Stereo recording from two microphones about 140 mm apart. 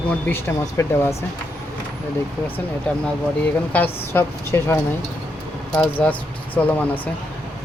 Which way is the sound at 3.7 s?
15° left (ahead or behind).